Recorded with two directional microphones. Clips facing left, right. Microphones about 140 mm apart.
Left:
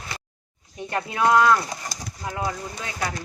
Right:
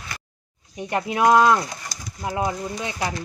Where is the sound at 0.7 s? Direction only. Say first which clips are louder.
Right 4 dB; 20° right (ahead or behind).